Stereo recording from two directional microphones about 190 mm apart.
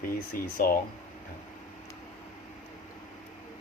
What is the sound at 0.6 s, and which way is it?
Speech, 50° left (ahead or behind).